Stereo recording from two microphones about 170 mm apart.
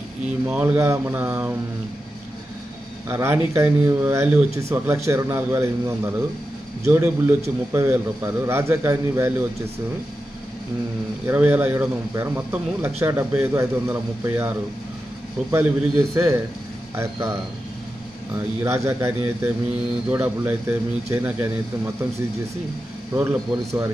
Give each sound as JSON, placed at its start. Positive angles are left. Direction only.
{"t": 0.5, "sound": "a man's voice", "side_deg": -10}
{"t": 3.1, "sound": "a man's voice", "side_deg": -15}
{"t": 11.2, "sound": "a man's voice", "side_deg": -10}
{"t": 15.5, "sound": "a man's voice", "side_deg": -15}
{"t": 18.6, "sound": "a man's voice", "side_deg": -15}
{"t": 23.1, "sound": "a man's voice", "side_deg": -15}